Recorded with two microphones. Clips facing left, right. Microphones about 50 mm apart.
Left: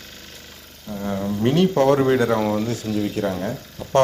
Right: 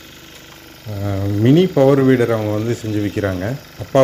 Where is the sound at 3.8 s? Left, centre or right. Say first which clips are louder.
Right 3 dB; right.